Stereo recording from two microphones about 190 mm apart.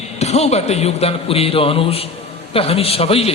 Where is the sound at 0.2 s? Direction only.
35° left (ahead or behind).